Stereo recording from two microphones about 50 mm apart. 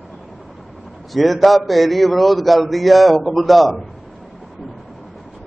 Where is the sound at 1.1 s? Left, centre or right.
Centre.